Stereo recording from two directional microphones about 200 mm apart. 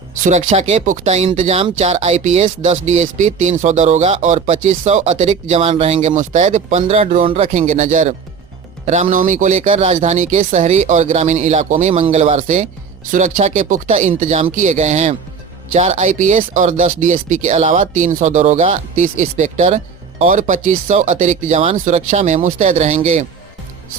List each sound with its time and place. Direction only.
0.3 s speech: 35° right (ahead or behind)